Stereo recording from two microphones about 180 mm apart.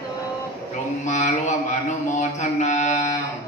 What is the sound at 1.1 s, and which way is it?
Mantra, 40° left (ahead or behind).